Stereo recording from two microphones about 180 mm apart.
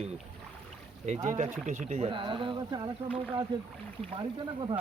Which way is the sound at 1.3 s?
45° right (ahead or behind).